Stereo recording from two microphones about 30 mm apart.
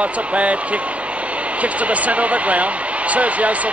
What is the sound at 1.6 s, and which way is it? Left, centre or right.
Speech, right.